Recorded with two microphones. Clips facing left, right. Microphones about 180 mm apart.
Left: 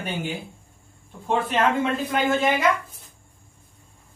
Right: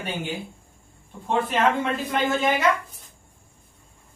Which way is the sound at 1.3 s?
Centre (ahead or behind).